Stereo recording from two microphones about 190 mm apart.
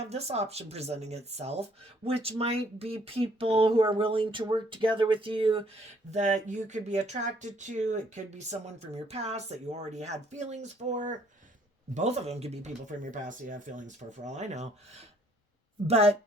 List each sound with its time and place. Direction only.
0.0 s speech: 35° right (ahead or behind)
15.9 s speech: 35° right (ahead or behind)